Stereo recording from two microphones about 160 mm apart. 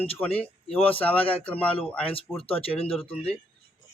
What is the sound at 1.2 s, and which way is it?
Speech, 35° left (ahead or behind).